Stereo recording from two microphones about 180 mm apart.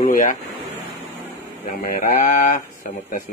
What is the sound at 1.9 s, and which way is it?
Speech, 50° left (ahead or behind).